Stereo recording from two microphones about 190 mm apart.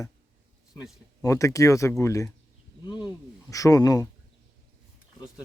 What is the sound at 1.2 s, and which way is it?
Speech, 15° left (ahead or behind).